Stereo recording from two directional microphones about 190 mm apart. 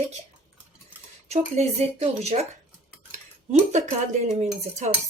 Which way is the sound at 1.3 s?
35° right (ahead or behind).